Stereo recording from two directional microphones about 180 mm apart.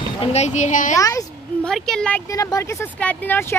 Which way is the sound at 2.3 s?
15° left (ahead or behind).